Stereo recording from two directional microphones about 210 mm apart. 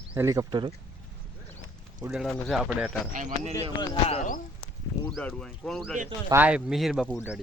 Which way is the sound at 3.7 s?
20° left (ahead or behind).